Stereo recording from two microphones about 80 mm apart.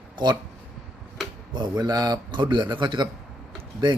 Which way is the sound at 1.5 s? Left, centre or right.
Right.